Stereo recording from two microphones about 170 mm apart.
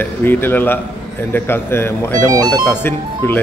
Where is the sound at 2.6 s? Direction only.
10° left (ahead or behind).